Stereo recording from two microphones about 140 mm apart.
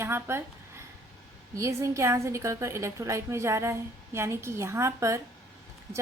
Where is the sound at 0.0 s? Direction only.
15° right (ahead or behind).